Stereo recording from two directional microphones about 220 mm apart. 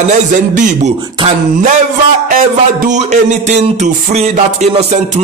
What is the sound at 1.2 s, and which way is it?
Speech, 30° right (ahead or behind).